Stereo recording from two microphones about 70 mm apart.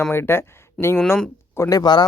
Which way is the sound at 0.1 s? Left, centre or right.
Left.